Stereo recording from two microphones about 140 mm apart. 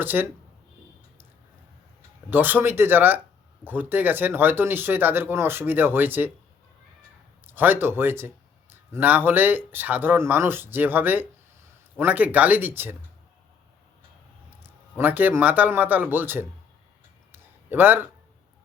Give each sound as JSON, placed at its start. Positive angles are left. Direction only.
{"t": 0.0, "sound": "speech", "side_deg": -15}
{"t": 2.3, "sound": "speech", "side_deg": -15}
{"t": 7.4, "sound": "speech", "side_deg": -15}
{"t": 14.6, "sound": "a man's voice", "side_deg": -15}
{"t": 17.3, "sound": "a sound", "side_deg": -15}